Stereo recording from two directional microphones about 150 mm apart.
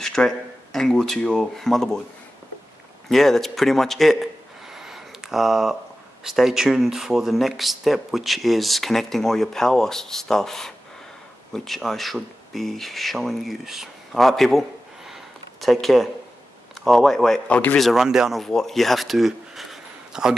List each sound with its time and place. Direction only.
0.0 s a sound: 5° left (ahead or behind)
0.7 s speech: centre (ahead or behind)
3.1 s a man's voice: centre (ahead or behind)